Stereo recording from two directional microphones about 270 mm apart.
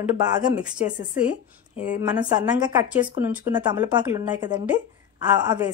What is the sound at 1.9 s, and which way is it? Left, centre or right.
Speech, centre.